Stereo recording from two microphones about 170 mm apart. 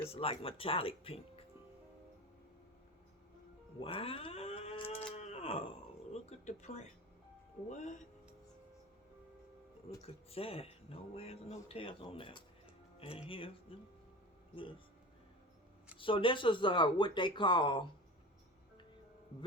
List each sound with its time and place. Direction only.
0.0 s speech: 35° left (ahead or behind)
3.8 s cat: 35° left (ahead or behind)
5.1 s a sound: 40° left (ahead or behind)
6.4 s speech: 45° left (ahead or behind)
10.2 s speech: 35° left (ahead or behind)
16.0 s speech: 30° left (ahead or behind)